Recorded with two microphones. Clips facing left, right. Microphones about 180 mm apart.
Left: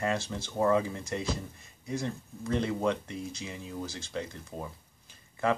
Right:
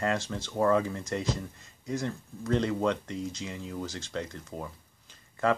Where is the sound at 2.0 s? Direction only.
15° left (ahead or behind).